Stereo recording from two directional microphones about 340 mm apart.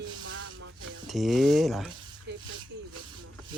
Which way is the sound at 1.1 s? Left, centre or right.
Centre.